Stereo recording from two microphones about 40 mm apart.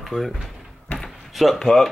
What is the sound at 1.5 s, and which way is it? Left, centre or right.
Speech, centre.